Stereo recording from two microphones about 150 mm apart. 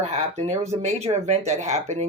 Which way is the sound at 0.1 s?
45° right (ahead or behind).